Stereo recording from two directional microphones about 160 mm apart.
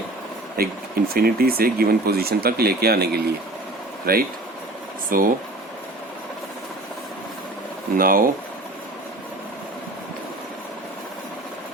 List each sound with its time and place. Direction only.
0.5 s speech: 70° right (ahead or behind)
4.0 s speech: 70° right (ahead or behind)
7.9 s speech: 60° right (ahead or behind)